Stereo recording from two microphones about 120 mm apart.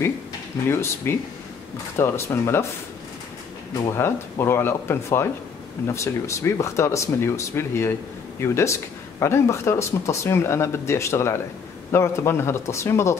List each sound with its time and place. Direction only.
0.7 s speech: 20° left (ahead or behind)
3.9 s speech: 20° left (ahead or behind)